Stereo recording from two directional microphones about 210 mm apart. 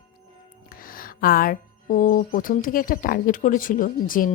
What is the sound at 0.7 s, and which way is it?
Speech, 45° left (ahead or behind).